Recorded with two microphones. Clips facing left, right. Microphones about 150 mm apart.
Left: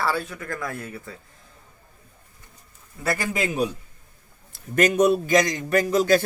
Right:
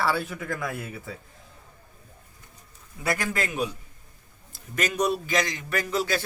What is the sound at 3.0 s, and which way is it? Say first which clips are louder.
Speech: left 2 dB; centre (ahead or behind).